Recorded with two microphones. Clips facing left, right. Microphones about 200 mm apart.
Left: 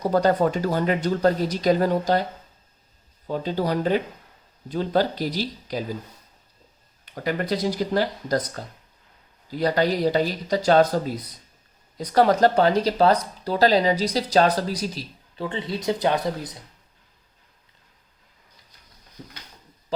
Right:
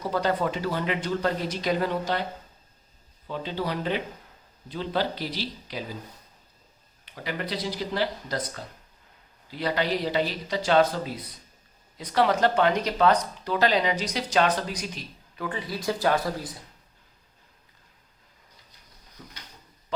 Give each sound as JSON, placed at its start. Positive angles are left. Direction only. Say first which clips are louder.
{"t": 0.0, "sound": "speech", "louder": "left 6 dB", "side_deg": 45}
{"t": 3.2, "sound": "speech", "louder": "left 6 dB", "side_deg": 45}
{"t": 7.0, "sound": "speech", "louder": "left 6 dB", "side_deg": 45}
{"t": 19.2, "sound": "a sound", "louder": "left 5 dB", "side_deg": 30}